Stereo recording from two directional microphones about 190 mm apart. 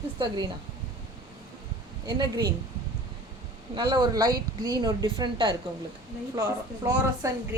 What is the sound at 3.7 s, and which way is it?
A woman's voice, 25° right (ahead or behind).